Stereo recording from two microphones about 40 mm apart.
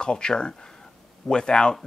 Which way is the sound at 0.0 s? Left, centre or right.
Left.